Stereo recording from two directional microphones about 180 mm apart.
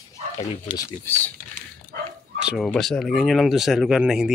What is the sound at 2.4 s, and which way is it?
Speech, 5° right (ahead or behind).